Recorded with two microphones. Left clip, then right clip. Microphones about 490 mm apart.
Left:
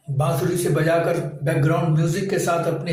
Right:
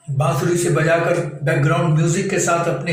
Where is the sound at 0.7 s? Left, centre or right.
Left.